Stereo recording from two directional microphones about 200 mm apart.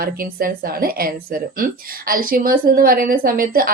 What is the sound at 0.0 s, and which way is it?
A woman's voice, 50° right (ahead or behind).